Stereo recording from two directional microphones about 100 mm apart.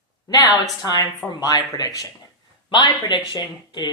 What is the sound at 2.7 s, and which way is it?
Speech, 50° left (ahead or behind).